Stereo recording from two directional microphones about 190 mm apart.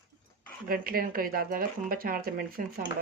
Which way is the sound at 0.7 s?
50° right (ahead or behind).